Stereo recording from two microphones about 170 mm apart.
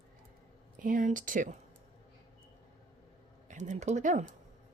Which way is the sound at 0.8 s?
50° right (ahead or behind).